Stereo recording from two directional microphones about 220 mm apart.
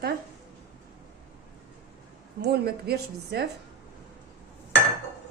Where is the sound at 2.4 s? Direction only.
45° right (ahead or behind).